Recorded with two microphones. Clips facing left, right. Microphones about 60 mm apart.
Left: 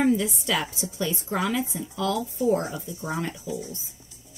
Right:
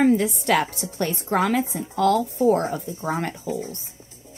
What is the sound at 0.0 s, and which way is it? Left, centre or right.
A woman's voice, right.